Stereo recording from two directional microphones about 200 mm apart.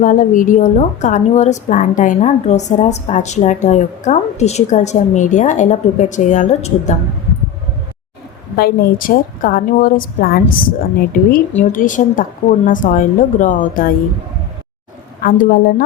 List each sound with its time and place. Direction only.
0.0 s a woman's voice: 40° left (ahead or behind)
8.5 s a woman's voice: 50° left (ahead or behind)
15.2 s a woman's voice: 45° left (ahead or behind)